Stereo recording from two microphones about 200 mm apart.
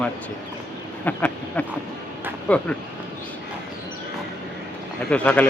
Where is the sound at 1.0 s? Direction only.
10° left (ahead or behind).